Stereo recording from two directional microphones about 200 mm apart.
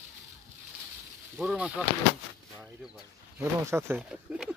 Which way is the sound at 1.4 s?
5° right (ahead or behind).